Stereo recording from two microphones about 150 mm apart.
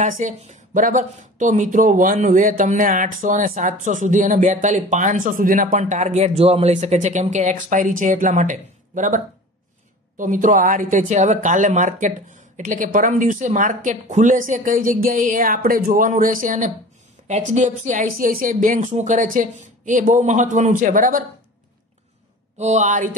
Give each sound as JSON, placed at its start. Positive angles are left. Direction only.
{"t": 0.0, "sound": "speech", "side_deg": -55}
{"t": 22.6, "sound": "speech", "side_deg": -50}